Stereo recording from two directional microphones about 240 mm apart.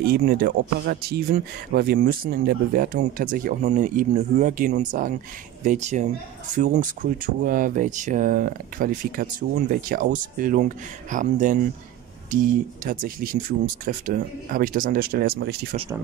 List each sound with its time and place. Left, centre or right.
0.0 s speech: right
12.8 s speech: right